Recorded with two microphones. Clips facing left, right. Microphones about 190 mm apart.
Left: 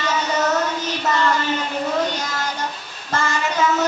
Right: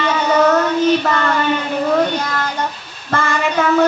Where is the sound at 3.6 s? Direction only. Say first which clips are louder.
Right 3 dB; 60° right (ahead or behind).